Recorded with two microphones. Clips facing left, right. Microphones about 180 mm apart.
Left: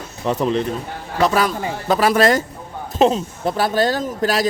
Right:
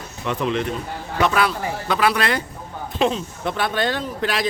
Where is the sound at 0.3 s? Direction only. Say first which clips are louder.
Left 4 dB; 40° left (ahead or behind).